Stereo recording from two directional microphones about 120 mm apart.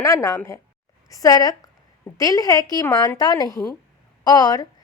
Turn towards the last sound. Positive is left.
turn(degrees=35)  # may be behind; listen again after turning